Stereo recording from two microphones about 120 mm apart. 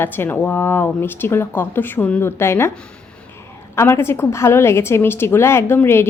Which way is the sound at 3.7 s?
20° left (ahead or behind).